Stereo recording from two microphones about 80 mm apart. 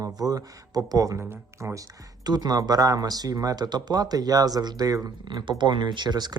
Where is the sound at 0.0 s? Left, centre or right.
Right.